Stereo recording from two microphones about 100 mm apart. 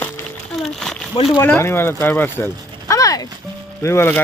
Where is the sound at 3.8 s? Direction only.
25° left (ahead or behind).